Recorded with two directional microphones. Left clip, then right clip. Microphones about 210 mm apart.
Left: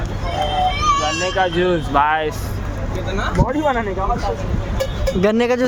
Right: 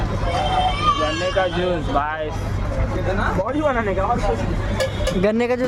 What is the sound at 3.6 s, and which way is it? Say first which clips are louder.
Speech: left 1 dB; 25° left (ahead or behind).